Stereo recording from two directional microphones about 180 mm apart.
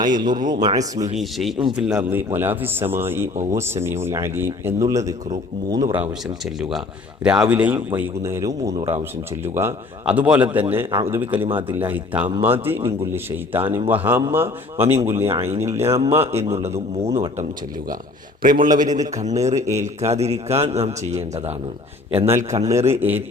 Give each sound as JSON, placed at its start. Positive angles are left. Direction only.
{"t": 0.2, "sound": "speech", "side_deg": -25}
{"t": 1.2, "sound": "a man's voice", "side_deg": 0}
{"t": 5.9, "sound": "a man's voice", "side_deg": -5}
{"t": 16.3, "sound": "a man's voice", "side_deg": -35}
{"t": 18.6, "sound": "a man's voice", "side_deg": -45}
{"t": 22.7, "sound": "a man's voice", "side_deg": -15}